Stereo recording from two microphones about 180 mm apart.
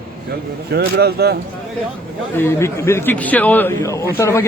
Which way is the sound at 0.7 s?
60° right (ahead or behind).